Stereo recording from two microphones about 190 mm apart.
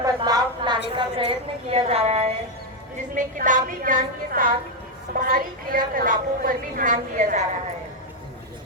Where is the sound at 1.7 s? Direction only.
30° right (ahead or behind).